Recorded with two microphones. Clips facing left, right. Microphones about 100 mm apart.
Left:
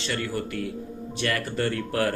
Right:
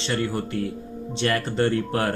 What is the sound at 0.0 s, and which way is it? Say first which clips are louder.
Speech: right 3 dB; 30° right (ahead or behind).